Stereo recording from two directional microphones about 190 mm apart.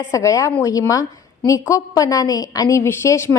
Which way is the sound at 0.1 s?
15° left (ahead or behind).